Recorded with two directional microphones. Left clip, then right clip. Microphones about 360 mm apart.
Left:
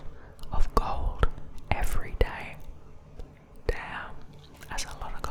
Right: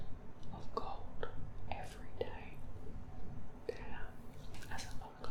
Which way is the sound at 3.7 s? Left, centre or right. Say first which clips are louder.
Left 11 dB; left.